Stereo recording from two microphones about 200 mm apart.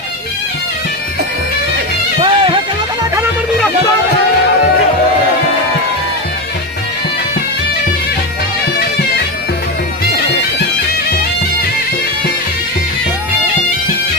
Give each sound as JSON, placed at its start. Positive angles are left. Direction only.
{"t": 2.2, "sound": "music", "side_deg": -25}